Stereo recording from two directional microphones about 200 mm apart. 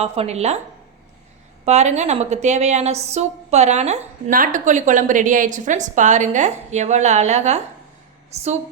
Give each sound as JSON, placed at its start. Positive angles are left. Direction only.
{"t": 0.0, "sound": "a woman's voice", "side_deg": -30}
{"t": 1.6, "sound": "a woman's voice", "side_deg": -35}